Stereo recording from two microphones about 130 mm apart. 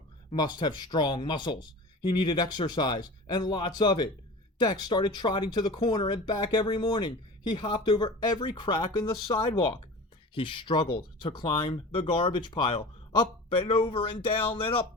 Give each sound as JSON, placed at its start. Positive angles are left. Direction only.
{"t": 0.3, "sound": "speech", "side_deg": 35}